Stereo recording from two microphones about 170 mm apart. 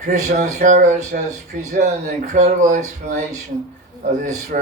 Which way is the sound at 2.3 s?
45° right (ahead or behind).